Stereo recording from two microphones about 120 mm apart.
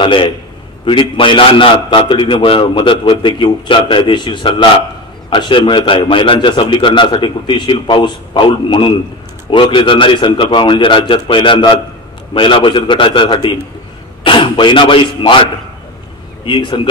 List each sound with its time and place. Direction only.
0.0 s a man's voice: 45° left (ahead or behind)